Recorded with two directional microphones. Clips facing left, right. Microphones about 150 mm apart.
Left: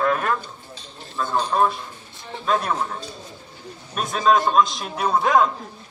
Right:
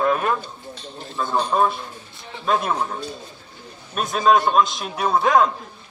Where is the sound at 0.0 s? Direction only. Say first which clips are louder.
Right 1 dB; 15° right (ahead or behind).